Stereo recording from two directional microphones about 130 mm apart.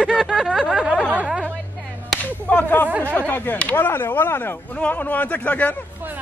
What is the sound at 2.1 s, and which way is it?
Whip, 10° left (ahead or behind).